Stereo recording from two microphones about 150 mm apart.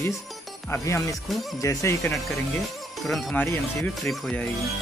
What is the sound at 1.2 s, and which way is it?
Speech, centre (ahead or behind).